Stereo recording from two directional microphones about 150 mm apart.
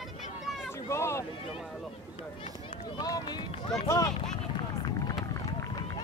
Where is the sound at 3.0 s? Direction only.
25° left (ahead or behind).